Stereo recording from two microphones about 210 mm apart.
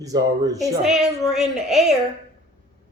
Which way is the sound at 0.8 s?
Centre (ahead or behind).